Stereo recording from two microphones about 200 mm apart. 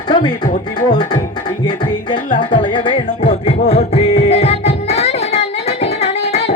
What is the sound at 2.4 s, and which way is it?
Music, 25° left (ahead or behind).